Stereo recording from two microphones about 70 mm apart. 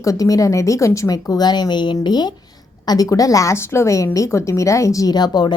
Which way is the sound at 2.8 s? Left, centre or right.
Left.